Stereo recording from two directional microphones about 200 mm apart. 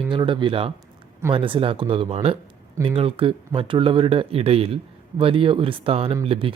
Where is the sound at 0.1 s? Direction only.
25° right (ahead or behind).